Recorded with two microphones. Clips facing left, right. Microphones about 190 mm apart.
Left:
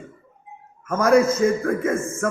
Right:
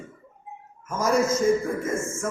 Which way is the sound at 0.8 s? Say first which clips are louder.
Left 6 dB; 60° left (ahead or behind).